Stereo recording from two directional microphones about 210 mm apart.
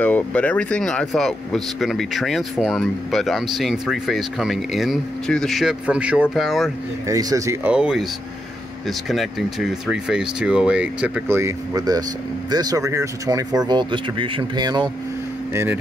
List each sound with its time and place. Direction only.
0.0 s speech: 5° left (ahead or behind)
7.1 s speech: 15° right (ahead or behind)
7.7 s speech: centre (ahead or behind)